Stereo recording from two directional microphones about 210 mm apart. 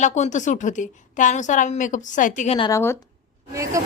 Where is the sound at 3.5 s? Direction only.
15° right (ahead or behind).